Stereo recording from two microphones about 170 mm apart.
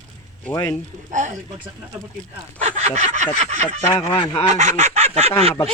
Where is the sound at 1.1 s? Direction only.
45° right (ahead or behind).